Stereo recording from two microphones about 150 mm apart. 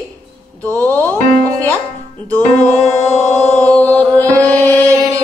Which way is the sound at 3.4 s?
15° left (ahead or behind).